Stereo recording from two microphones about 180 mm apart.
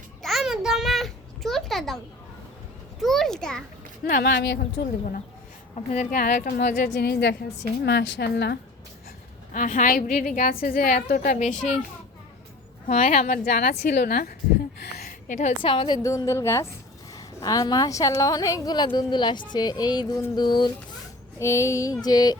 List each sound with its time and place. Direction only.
0.2 s babbling: centre (ahead or behind)
3.0 s a sound: centre (ahead or behind)
4.0 s a woman's voice: 55° left (ahead or behind)
9.5 s a woman's voice: 45° left (ahead or behind)
12.9 s a woman's voice: 45° left (ahead or behind)
14.8 s a sound: 65° left (ahead or behind); by 15.5 s 45° left (ahead or behind)
15.6 s a woman's voice: 25° left (ahead or behind)